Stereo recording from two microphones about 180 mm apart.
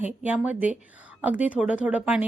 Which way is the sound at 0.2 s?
10° right (ahead or behind).